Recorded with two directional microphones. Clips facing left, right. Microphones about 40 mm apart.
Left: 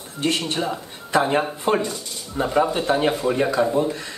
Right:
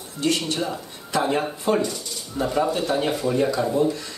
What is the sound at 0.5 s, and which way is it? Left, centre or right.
Speech, left.